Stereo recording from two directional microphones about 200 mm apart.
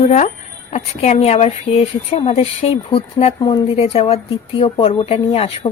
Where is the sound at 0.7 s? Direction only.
30° left (ahead or behind).